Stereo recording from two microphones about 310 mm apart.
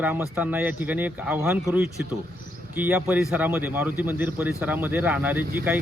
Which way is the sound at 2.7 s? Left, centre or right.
Centre.